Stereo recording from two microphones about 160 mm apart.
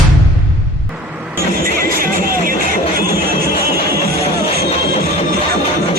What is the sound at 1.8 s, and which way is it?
Music, 65° right (ahead or behind).